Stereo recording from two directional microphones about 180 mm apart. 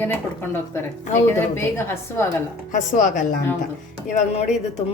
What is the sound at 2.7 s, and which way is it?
A woman's voice, 45° left (ahead or behind).